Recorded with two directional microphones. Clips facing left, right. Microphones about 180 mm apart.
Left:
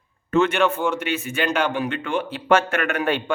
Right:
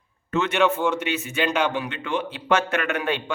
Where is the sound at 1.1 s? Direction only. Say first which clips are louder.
Left 1 dB; 50° left (ahead or behind).